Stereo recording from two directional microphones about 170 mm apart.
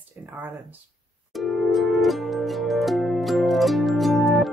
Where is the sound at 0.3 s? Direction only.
10° right (ahead or behind).